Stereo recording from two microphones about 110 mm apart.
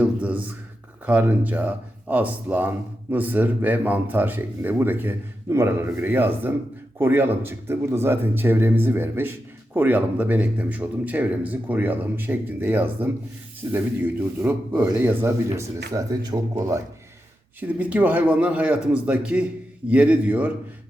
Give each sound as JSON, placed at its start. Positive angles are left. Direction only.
{"t": 0.0, "sound": "a sound", "side_deg": -15}
{"t": 1.0, "sound": "speech", "side_deg": -15}
{"t": 15.5, "sound": "speech", "side_deg": -30}
{"t": 17.6, "sound": "speech", "side_deg": -15}